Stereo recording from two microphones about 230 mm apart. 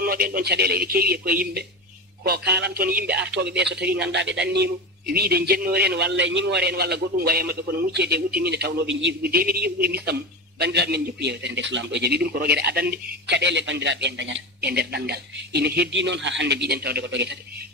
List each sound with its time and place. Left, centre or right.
0.0 s a man's voice: right